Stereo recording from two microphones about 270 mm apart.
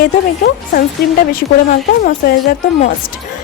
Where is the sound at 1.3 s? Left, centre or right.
Left.